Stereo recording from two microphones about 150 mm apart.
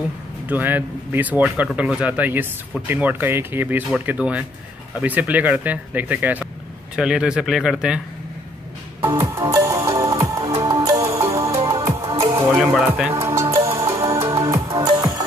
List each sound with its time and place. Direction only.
0.5 s speech: 10° right (ahead or behind)
9.1 s music: 20° right (ahead or behind)
11.0 s music: 40° right (ahead or behind)
11.2 s music: 20° right (ahead or behind)
12.8 s speech: 5° right (ahead or behind)
13.1 s music: 20° right (ahead or behind)